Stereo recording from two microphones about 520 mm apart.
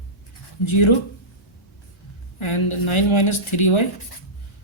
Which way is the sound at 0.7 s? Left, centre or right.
Left.